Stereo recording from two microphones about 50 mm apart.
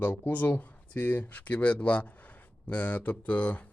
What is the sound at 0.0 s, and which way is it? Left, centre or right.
Speech, left.